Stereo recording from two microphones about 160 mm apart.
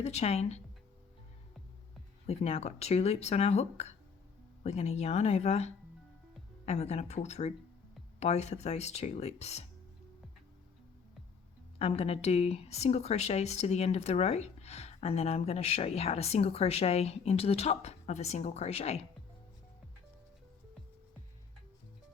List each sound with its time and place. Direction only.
0.0 s speech: 40° left (ahead or behind)
2.2 s speech: 40° left (ahead or behind)
11.8 s speech: 40° left (ahead or behind)